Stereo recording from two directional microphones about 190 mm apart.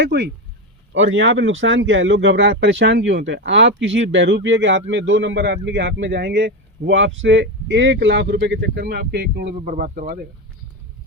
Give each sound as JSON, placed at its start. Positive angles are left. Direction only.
{"t": 0.0, "sound": "speech", "side_deg": -65}
{"t": 0.9, "sound": "speech", "side_deg": -80}
{"t": 9.6, "sound": "speech", "side_deg": -45}